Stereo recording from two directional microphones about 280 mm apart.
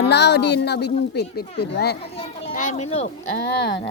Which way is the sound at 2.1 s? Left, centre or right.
Left.